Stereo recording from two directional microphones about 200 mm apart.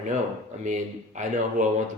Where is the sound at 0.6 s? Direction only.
40° right (ahead or behind).